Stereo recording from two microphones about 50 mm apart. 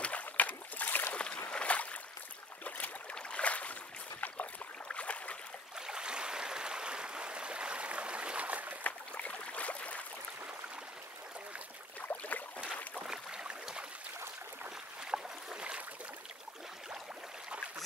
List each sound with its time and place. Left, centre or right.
0.0 s boat: left
1.1 s boat: left
5.8 s stream: centre; by 8.7 s right
8.8 s a sound: left
12.1 s boat: left
13.0 s a sound: centre
15.0 s boat: centre